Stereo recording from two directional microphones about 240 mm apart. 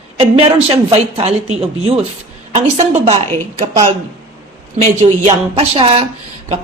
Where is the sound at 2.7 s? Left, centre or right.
Right.